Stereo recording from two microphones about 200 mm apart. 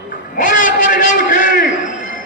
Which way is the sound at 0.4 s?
40° left (ahead or behind).